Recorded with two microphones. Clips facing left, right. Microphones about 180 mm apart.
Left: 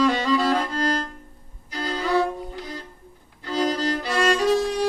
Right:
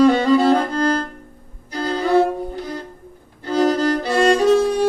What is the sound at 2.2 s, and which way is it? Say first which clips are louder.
Music: right 6 dB; 45° right (ahead or behind).